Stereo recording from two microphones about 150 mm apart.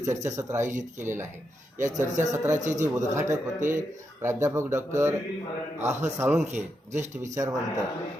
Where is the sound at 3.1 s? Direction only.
20° right (ahead or behind).